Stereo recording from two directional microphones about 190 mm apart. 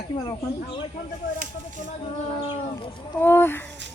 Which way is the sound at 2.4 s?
25° left (ahead or behind).